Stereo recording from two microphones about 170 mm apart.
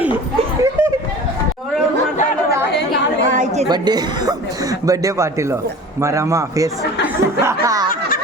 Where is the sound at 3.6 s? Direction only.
25° right (ahead or behind).